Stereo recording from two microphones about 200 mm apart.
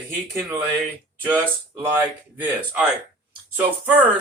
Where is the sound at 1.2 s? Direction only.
10° right (ahead or behind).